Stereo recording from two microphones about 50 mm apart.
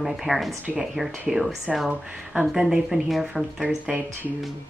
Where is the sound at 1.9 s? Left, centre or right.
Right.